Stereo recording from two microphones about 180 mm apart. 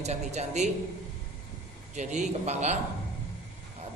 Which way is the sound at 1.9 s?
40° right (ahead or behind).